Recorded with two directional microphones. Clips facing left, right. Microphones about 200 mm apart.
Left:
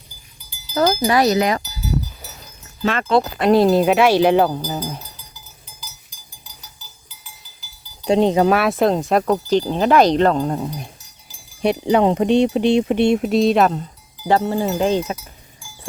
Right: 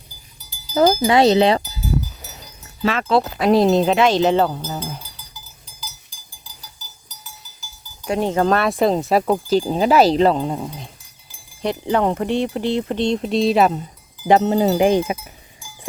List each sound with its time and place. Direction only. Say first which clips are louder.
1.1 s speech: right 3 dB; 25° right (ahead or behind)
2.8 s speech: even; centre (ahead or behind)
5.6 s cowbell: right 3 dB; 35° right (ahead or behind)
8.0 s speech: left 4 dB; 20° left (ahead or behind); by 10.7 s centre (ahead or behind)
11.6 s speech: left 3 dB; 15° left (ahead or behind); by 13.8 s centre (ahead or behind)
14.3 s speech: right 3 dB; 20° right (ahead or behind)